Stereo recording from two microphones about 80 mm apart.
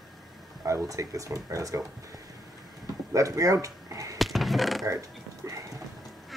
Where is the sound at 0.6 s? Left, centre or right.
Right.